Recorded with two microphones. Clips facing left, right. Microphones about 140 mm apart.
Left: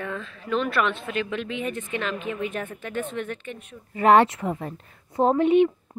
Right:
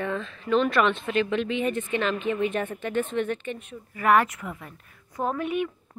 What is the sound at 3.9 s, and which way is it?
A woman's voice, 25° left (ahead or behind).